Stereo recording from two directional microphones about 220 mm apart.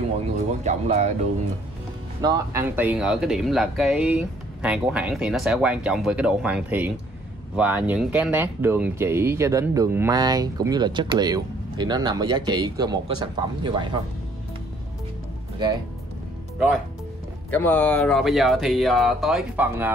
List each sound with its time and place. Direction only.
0.5 s speech: 30° right (ahead or behind)
2.2 s speech: 10° right (ahead or behind)
16.5 s speech: 5° right (ahead or behind)
17.5 s speech: 10° left (ahead or behind); by 19.9 s 10° right (ahead or behind)